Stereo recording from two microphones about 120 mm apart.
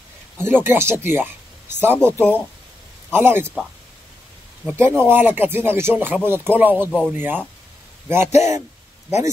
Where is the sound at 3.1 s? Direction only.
20° right (ahead or behind).